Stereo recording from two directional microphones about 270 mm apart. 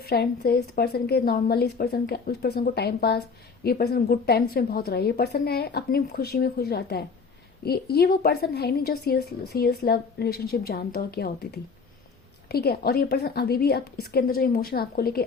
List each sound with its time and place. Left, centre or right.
0.0 s a woman's voice: left